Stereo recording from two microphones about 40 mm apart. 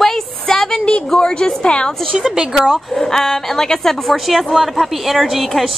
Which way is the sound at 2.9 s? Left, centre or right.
Centre.